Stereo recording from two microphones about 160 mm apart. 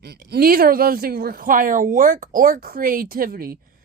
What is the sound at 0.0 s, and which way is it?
Speech, 90° right.